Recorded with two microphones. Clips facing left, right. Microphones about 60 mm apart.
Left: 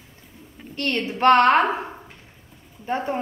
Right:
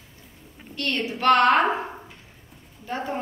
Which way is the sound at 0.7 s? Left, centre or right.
Left.